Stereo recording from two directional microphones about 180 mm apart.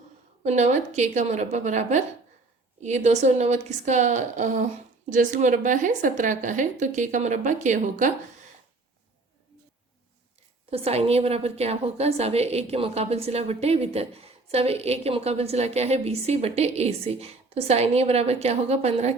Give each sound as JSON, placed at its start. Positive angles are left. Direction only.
{"t": 0.4, "sound": "a woman's voice", "side_deg": -40}
{"t": 10.7, "sound": "a woman's voice", "side_deg": -35}